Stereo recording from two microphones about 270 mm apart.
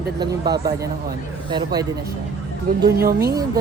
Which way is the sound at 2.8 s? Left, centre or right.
Right.